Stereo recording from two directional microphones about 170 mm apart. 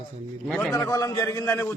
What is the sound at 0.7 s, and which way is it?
Speech, 20° left (ahead or behind).